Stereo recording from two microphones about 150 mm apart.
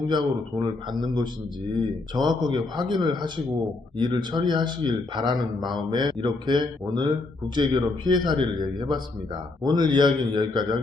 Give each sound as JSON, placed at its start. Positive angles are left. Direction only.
{"t": 0.1, "sound": "a man's voice", "side_deg": -30}